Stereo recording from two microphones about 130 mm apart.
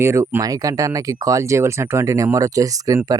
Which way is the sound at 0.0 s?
20° right (ahead or behind).